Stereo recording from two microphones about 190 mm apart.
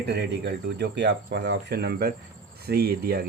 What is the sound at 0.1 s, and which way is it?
Speech, 60° right (ahead or behind).